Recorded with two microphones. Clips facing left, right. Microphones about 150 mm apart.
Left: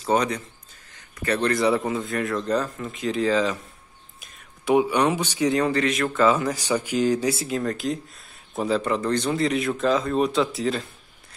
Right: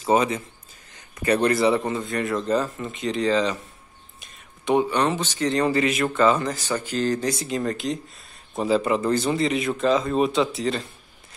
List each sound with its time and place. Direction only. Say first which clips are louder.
0.0 s speech: right 2 dB; 5° right (ahead or behind)
1.1 s speech: right 3 dB; 15° right (ahead or behind)
1.6 s speech: right 1 dB; centre (ahead or behind)
5.7 s speech: right 1 dB; 5° right (ahead or behind)